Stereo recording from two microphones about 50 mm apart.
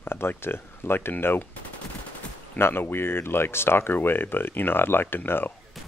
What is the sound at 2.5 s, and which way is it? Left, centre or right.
Speech, left.